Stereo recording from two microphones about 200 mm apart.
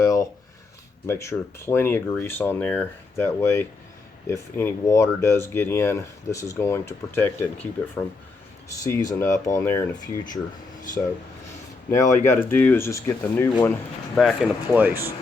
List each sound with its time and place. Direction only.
0.0 s a sound: 15° left (ahead or behind)
1.0 s speech: 15° left (ahead or behind)
11.9 s speech: 15° left (ahead or behind)
14.2 s speech: centre (ahead or behind)